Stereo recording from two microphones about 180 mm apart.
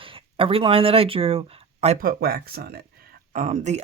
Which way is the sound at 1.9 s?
55° right (ahead or behind).